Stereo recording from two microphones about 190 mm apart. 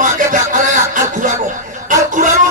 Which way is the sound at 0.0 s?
45° right (ahead or behind).